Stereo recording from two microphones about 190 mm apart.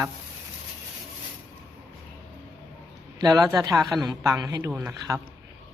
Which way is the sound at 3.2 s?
20° right (ahead or behind).